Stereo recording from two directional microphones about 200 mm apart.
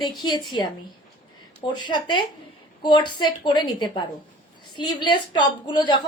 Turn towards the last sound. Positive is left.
turn(degrees=20)  # may be behind; listen again after turning